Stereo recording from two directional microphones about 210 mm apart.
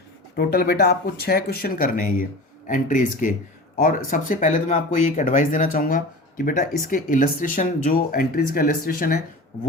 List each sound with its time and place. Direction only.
0.3 s speech: 50° left (ahead or behind)